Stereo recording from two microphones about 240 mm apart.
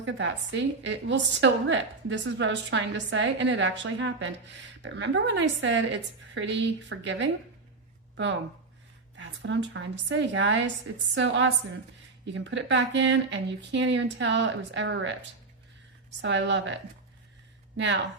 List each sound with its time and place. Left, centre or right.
0.0 s a woman's voice: right